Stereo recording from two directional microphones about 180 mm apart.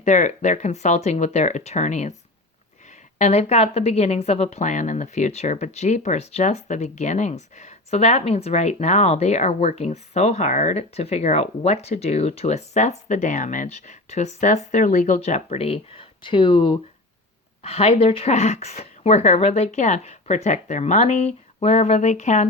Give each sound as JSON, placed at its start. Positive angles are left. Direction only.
{"t": 0.0, "sound": "a woman's voice", "side_deg": 40}
{"t": 3.2, "sound": "a woman's voice", "side_deg": 40}